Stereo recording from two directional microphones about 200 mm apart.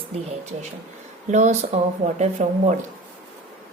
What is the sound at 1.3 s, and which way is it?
A woman's voice, 35° right (ahead or behind).